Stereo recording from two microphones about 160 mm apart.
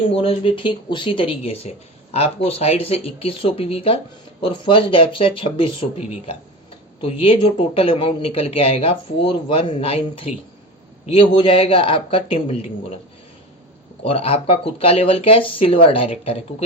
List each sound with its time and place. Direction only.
0.1 s speech: 35° left (ahead or behind)
11.3 s speech: 35° left (ahead or behind)
14.0 s speech: 35° left (ahead or behind)